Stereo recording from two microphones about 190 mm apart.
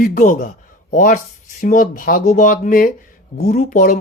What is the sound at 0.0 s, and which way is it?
Speech, 45° left (ahead or behind).